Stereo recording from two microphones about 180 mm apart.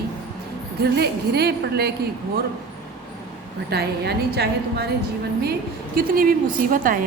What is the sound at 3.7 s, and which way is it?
A woman's voice, 65° right (ahead or behind).